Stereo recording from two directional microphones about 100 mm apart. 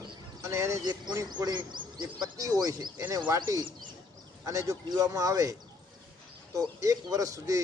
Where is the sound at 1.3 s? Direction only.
45° right (ahead or behind).